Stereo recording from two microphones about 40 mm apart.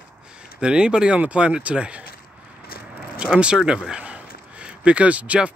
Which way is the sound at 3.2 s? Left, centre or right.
Right.